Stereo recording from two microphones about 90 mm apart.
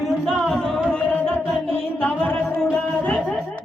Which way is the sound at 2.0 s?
15° left (ahead or behind).